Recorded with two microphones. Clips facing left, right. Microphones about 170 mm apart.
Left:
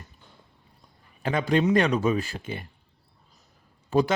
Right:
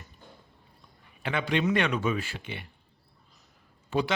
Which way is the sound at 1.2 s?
40° left (ahead or behind).